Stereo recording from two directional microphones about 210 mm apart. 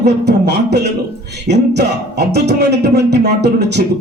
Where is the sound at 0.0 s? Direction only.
55° right (ahead or behind).